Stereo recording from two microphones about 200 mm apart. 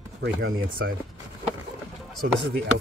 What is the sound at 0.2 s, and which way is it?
Speech, 55° right (ahead or behind).